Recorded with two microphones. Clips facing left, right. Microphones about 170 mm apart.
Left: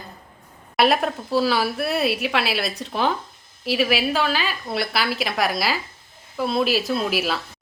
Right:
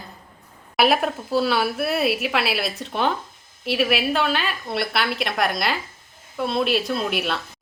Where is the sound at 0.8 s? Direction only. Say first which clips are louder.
Even; centre (ahead or behind).